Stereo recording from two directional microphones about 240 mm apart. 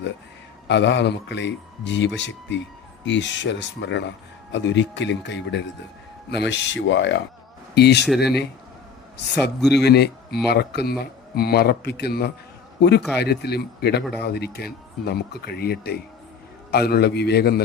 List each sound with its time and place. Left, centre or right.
0.7 s speech: left